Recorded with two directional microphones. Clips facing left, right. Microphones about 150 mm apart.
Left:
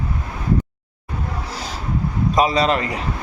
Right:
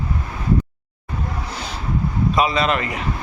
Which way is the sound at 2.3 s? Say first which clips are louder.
Left 3 dB; 40° left (ahead or behind).